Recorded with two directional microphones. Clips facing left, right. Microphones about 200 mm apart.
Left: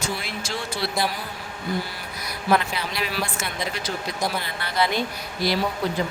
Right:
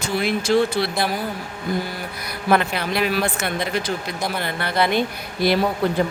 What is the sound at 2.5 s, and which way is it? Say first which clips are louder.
Speech: right 3 dB; 55° right (ahead or behind).